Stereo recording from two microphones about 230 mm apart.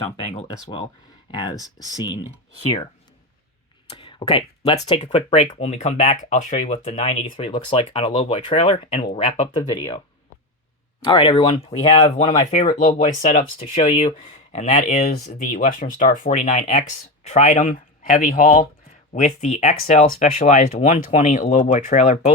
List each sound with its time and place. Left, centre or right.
0.3 s speech: centre
3.8 s speech: left
11.0 s speech: left